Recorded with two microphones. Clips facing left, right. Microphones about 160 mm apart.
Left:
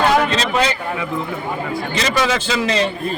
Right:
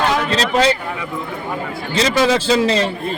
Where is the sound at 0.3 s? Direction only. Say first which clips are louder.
Right 3 dB; 35° right (ahead or behind).